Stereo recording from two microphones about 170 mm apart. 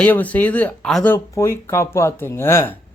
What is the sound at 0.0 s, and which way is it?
Speech, 10° left (ahead or behind).